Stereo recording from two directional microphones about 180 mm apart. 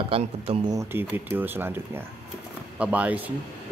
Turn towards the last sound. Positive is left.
turn(degrees=-10)  # may be behind; listen again after turning